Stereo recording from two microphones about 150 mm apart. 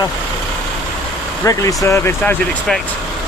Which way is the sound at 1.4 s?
20° left (ahead or behind).